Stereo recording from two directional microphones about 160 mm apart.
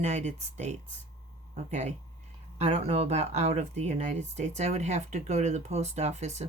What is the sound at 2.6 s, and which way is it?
Speech, 40° right (ahead or behind).